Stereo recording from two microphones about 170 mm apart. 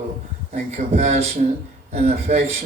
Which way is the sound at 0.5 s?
40° right (ahead or behind).